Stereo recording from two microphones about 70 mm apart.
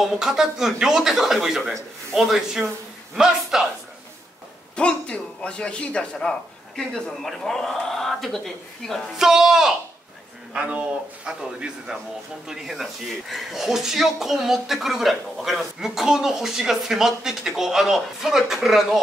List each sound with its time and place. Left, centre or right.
0.0 s speech: centre
4.7 s a man's voice: centre
9.1 s a man's voice: centre